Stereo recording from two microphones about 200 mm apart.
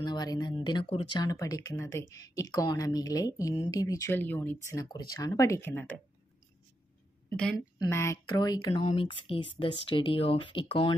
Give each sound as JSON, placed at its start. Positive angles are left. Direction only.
{"t": 0.0, "sound": "a woman's voice", "side_deg": 20}
{"t": 7.8, "sound": "speech", "side_deg": 15}